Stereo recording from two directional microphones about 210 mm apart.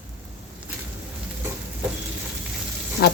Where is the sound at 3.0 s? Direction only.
50° left (ahead or behind).